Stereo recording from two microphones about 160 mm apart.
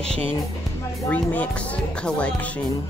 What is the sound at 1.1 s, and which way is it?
Speech, 10° left (ahead or behind).